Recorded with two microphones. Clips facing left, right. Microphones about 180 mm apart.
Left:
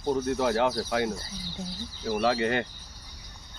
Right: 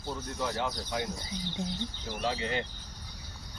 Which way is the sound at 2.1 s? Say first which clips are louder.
Left 8 dB; 65° left (ahead or behind).